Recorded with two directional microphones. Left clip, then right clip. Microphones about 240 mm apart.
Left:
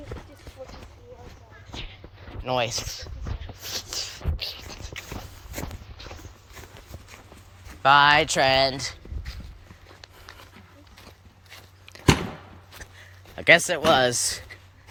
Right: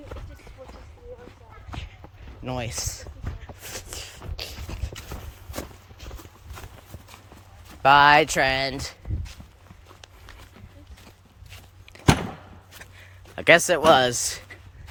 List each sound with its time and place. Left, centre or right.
1.7 s walk: centre
2.4 s speech: centre
2.8 s speech: right
3.4 s a sound: centre
7.8 s speech: right
8.4 s speech: centre
8.7 s speech: right
11.9 s a sound: centre